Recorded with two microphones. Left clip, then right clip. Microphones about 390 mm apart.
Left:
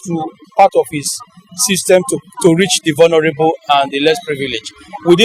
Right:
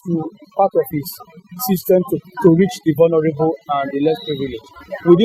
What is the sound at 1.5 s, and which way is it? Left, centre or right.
Speech, left.